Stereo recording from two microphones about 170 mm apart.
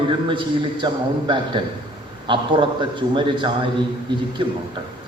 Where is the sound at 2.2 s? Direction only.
30° right (ahead or behind).